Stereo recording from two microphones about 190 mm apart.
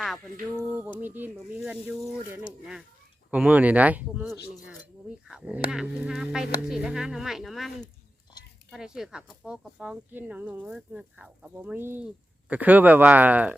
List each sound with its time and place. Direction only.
0.5 s speech: 10° right (ahead or behind)
3.3 s speech: 5° right (ahead or behind)